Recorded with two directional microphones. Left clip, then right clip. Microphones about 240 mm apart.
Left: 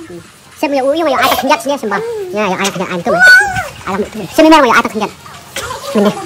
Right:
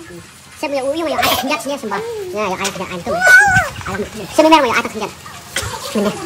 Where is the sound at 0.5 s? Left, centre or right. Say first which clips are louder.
Left 6 dB; centre.